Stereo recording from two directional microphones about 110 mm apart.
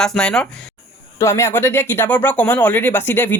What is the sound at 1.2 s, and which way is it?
Speech, 25° left (ahead or behind).